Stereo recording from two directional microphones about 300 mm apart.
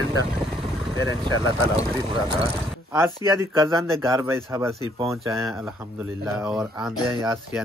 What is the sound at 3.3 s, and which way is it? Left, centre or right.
Speech, centre.